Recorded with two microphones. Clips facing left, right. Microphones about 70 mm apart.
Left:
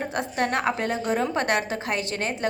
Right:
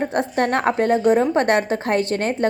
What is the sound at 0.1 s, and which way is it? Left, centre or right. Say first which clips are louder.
A woman's voice: right 6 dB; right.